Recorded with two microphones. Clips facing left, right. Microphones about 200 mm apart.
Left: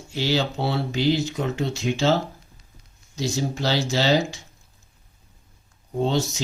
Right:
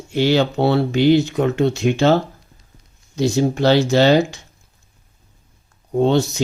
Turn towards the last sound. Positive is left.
turn(degrees=-60)  # may be behind; listen again after turning